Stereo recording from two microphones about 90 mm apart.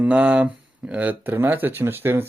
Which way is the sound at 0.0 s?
10° right (ahead or behind).